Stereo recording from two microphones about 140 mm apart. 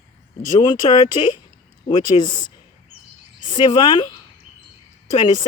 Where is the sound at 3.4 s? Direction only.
35° left (ahead or behind).